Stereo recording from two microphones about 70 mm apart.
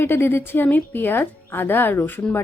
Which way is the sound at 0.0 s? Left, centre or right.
Left.